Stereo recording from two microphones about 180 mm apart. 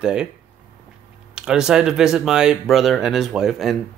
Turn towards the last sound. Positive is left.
turn(degrees=0)  # may be behind; listen again after turning